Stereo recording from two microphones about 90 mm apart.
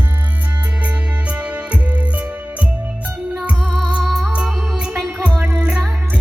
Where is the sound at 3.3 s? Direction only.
10° right (ahead or behind).